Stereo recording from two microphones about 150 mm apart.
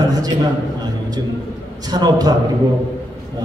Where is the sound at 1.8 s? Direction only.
25° right (ahead or behind).